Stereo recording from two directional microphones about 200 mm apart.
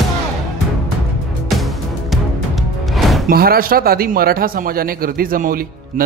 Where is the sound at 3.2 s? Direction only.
50° right (ahead or behind).